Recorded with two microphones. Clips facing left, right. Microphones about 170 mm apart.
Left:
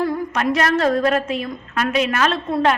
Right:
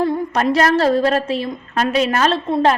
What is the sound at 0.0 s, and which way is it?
A woman's voice, 25° right (ahead or behind).